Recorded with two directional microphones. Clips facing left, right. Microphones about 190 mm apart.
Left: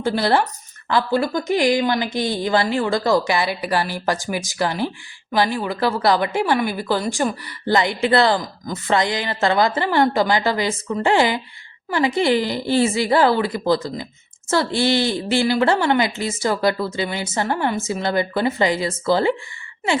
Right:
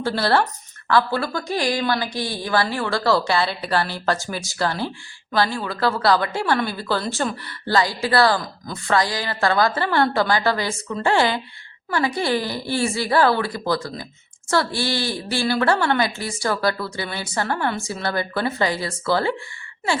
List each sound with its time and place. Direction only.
0.0 s a woman's voice: 20° left (ahead or behind)